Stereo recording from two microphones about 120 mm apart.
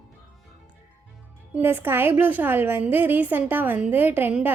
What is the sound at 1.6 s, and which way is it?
A woman's voice, 20° right (ahead or behind).